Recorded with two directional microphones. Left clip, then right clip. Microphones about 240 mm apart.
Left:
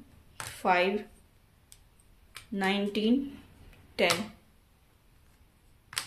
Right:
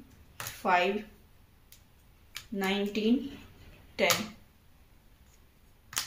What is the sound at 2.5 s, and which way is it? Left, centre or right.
Speech, left.